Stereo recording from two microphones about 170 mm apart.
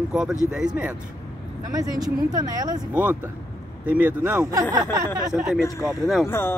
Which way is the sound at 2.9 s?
10° right (ahead or behind).